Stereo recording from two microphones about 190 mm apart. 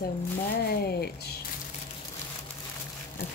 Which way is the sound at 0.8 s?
60° left (ahead or behind).